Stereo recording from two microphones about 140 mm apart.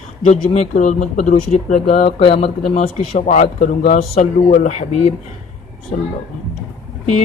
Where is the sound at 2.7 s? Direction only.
60° left (ahead or behind).